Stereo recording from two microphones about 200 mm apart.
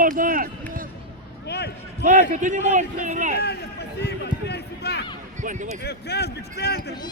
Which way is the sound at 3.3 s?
55° left (ahead or behind).